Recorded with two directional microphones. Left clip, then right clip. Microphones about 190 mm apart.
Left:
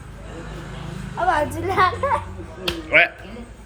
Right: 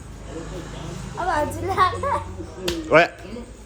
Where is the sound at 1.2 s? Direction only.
65° left (ahead or behind).